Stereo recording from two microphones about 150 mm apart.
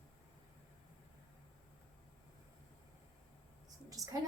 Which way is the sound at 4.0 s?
25° right (ahead or behind).